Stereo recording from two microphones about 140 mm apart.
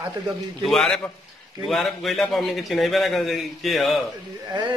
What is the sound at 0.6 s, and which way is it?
A man's voice, centre (ahead or behind).